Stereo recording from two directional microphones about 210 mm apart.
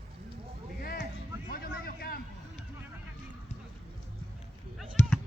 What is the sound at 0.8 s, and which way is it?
Music, 45° left (ahead or behind).